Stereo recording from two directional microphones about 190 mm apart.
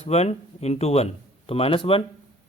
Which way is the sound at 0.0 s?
35° left (ahead or behind).